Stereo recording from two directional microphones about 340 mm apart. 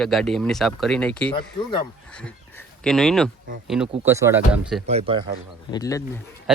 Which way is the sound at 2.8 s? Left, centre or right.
Centre.